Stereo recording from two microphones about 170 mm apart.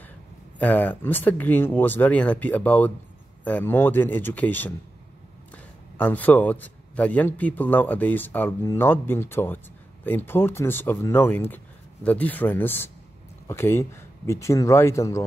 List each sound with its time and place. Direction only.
0.6 s a man's voice: 10° left (ahead or behind)